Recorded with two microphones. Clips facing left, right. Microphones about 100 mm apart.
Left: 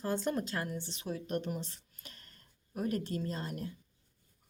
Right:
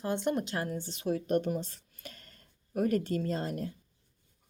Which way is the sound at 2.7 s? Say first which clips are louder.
Right 6 dB; 65° right (ahead or behind).